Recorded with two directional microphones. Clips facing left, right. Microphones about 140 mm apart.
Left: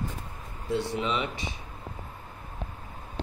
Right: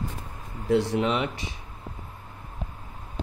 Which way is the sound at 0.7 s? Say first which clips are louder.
Right 6 dB; 90° right.